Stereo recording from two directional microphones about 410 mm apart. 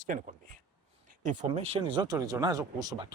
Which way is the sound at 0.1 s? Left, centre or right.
Right.